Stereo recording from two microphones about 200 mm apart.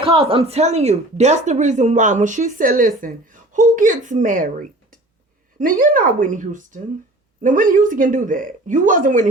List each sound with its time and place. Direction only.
0.0 s speech: 30° right (ahead or behind)